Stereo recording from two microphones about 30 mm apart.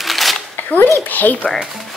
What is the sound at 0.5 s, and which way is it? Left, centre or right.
Speech, left.